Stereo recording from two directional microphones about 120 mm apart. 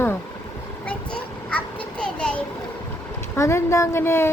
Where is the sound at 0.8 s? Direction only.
10° left (ahead or behind).